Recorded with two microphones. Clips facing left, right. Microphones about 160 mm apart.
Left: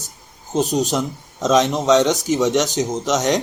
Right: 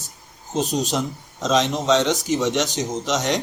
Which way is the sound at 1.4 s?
45° left (ahead or behind).